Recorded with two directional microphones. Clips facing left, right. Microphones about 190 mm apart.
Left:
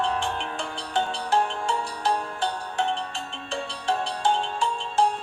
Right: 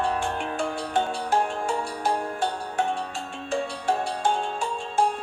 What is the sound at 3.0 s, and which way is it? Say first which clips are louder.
Music: right 1 dB; 10° right (ahead or behind).